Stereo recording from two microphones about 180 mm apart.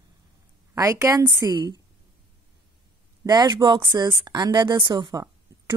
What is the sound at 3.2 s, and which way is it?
A woman's voice, 25° right (ahead or behind).